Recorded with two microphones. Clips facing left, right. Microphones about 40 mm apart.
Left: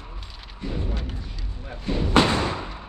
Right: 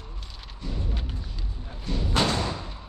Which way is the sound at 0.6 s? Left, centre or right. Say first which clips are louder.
Left 5 dB; left.